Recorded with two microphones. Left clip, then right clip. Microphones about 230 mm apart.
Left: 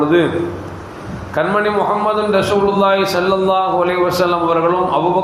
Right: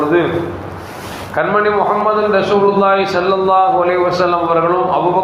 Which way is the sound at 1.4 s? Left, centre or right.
Left.